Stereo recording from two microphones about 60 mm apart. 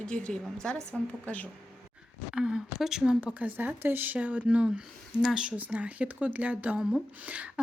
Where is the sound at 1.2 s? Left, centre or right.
Left.